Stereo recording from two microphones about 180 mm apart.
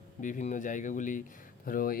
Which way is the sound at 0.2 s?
45° left (ahead or behind).